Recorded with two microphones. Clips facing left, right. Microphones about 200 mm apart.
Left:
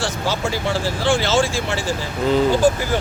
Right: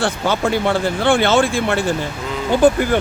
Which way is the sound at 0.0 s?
55° right (ahead or behind).